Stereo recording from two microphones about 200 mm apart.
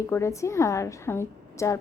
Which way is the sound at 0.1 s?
15° left (ahead or behind).